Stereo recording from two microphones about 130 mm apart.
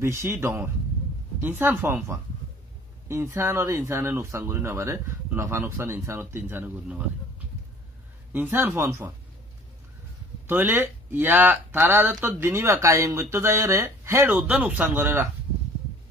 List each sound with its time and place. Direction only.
0.0 s speech: 20° right (ahead or behind)
10.4 s speech: 15° right (ahead or behind)